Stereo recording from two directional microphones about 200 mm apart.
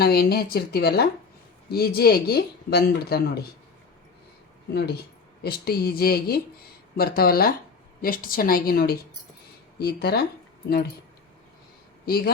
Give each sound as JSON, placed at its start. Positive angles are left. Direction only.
{"t": 0.0, "sound": "speech", "side_deg": 50}
{"t": 4.7, "sound": "speech", "side_deg": 55}
{"t": 12.0, "sound": "speech", "side_deg": 50}